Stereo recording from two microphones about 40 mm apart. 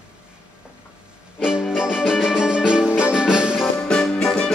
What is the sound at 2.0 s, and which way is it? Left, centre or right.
Music, right.